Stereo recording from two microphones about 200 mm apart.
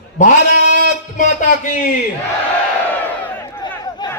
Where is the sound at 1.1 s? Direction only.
40° left (ahead or behind).